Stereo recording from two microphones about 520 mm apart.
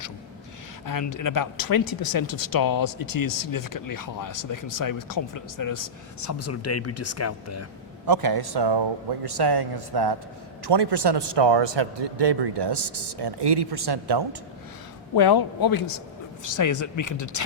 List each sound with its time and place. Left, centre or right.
0.9 s speech: left
8.0 s a man's voice: right
15.1 s a man's voice: left